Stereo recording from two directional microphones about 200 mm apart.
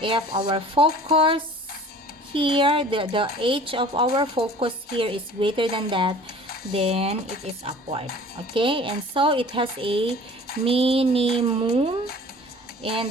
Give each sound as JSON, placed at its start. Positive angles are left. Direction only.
{"t": 0.0, "sound": "a woman's voice", "side_deg": -25}